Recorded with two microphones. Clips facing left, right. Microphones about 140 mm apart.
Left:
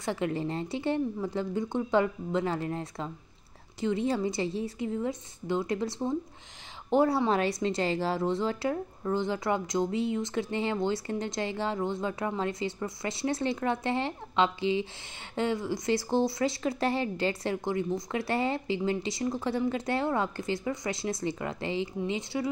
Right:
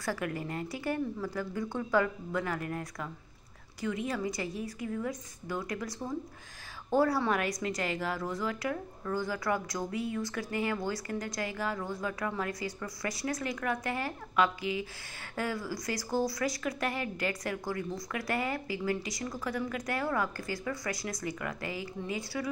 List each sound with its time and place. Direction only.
0.0 s a woman's voice: 25° left (ahead or behind)